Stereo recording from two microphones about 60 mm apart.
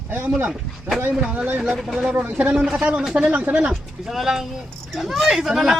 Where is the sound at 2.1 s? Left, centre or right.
Right; by 3.3 s centre.